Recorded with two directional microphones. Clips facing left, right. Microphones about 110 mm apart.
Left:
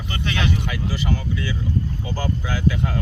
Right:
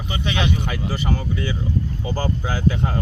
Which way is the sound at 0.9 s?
40° right (ahead or behind).